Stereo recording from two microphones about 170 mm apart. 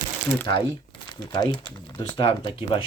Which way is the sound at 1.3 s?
25° left (ahead or behind).